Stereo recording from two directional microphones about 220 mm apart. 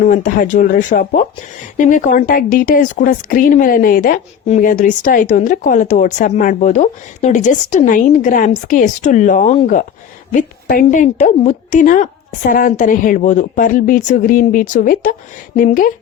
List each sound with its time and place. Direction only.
0.1 s a woman's voice: 40° left (ahead or behind)